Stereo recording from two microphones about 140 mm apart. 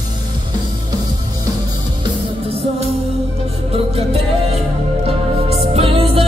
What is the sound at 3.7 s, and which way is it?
Music, 45° right (ahead or behind).